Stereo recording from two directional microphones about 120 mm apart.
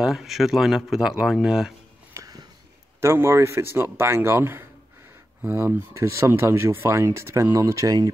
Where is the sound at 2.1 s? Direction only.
30° right (ahead or behind).